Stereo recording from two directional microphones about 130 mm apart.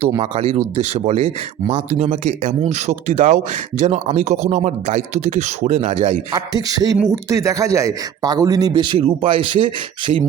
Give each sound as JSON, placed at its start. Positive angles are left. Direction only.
{"t": 0.2, "sound": "speech", "side_deg": -50}
{"t": 6.3, "sound": "a sound", "side_deg": -30}
{"t": 7.1, "sound": "a man's voice", "side_deg": -25}